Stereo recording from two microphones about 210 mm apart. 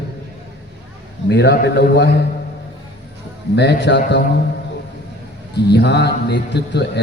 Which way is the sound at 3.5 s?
55° left (ahead or behind).